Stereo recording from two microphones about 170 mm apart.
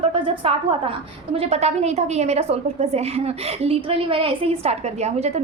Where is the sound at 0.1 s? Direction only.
35° right (ahead or behind).